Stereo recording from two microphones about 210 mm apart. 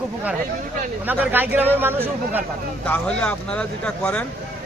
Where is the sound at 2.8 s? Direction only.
5° left (ahead or behind).